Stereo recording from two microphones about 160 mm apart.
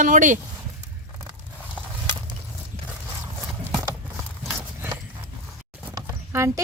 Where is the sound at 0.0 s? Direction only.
50° right (ahead or behind).